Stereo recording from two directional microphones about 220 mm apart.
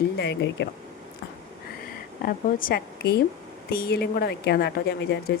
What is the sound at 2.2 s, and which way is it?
A woman's voice, 40° left (ahead or behind).